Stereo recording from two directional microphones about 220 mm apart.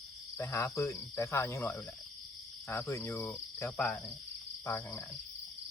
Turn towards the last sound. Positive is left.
turn(degrees=15)  # may be behind; listen again after turning